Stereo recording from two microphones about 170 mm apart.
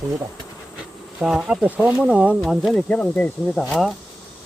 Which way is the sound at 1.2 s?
5° right (ahead or behind).